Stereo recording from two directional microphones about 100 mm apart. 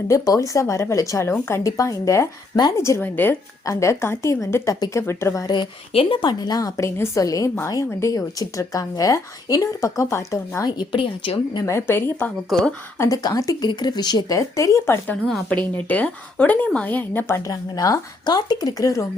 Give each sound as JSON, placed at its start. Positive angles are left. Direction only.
{"t": 0.1, "sound": "speech", "side_deg": 30}
{"t": 3.0, "sound": "speech", "side_deg": 20}
{"t": 3.7, "sound": "speech", "side_deg": 30}
{"t": 5.9, "sound": "speech", "side_deg": 70}
{"t": 11.6, "sound": "speech", "side_deg": 25}
{"t": 12.5, "sound": "speech", "side_deg": 0}
{"t": 13.0, "sound": "speech", "side_deg": 40}
{"t": 15.7, "sound": "speech", "side_deg": 15}